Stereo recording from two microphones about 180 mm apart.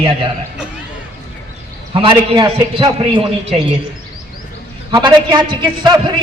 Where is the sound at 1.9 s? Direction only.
30° right (ahead or behind).